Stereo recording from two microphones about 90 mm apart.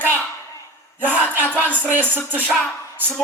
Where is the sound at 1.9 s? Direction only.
20° right (ahead or behind).